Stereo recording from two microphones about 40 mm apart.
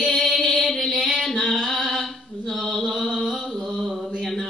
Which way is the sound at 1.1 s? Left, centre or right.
Centre.